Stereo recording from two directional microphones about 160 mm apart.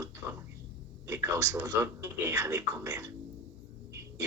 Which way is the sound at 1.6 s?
15° right (ahead or behind).